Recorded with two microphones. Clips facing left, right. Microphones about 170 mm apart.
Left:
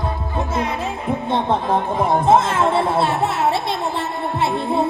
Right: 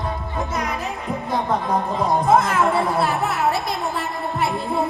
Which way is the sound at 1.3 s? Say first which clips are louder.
Left 2 dB; 25° left (ahead or behind).